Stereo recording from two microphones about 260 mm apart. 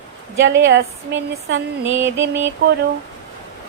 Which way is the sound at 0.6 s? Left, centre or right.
Right.